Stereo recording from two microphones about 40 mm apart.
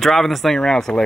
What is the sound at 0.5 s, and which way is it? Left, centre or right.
Speech, centre.